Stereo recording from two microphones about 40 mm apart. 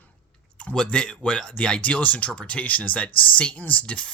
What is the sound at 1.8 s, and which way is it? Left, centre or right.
Speech, left.